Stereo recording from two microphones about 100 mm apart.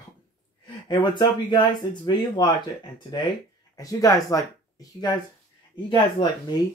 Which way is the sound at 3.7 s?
35° left (ahead or behind).